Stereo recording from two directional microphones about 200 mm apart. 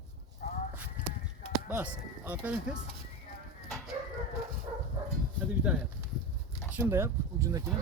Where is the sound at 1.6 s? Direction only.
10° right (ahead or behind).